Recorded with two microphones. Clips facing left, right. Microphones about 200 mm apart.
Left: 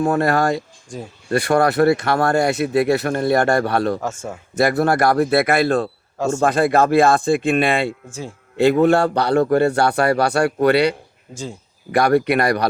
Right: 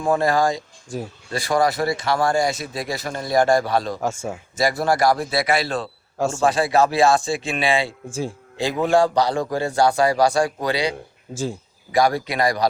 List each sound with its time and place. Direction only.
0.0 s speech: 65° left (ahead or behind)
0.9 s speech: 5° right (ahead or behind)
1.3 s speech: 60° left (ahead or behind)
4.0 s speech: 10° right (ahead or behind)
4.5 s speech: 60° left (ahead or behind)
6.1 s speech: 10° right (ahead or behind)
6.4 s speech: 55° left (ahead or behind)